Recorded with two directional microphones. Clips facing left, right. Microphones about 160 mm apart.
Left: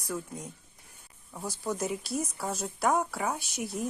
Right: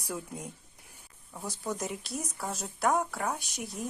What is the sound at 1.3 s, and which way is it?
Speech, centre (ahead or behind).